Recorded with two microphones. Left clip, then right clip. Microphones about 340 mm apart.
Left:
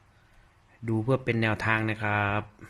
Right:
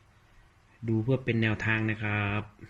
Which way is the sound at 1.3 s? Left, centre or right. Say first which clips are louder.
Left 2 dB; centre.